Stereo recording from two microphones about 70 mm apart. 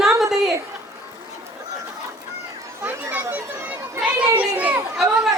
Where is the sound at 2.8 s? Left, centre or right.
Right.